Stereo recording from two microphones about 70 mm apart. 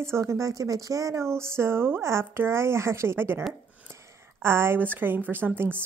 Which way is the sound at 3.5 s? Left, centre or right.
Right.